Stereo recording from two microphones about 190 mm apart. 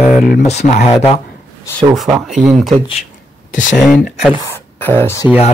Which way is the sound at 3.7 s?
Centre (ahead or behind).